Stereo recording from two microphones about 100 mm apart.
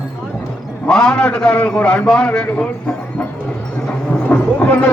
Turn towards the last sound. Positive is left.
turn(degrees=15)  # may be behind; listen again after turning